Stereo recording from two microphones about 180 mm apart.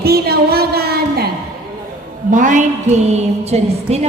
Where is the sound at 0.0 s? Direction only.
60° right (ahead or behind).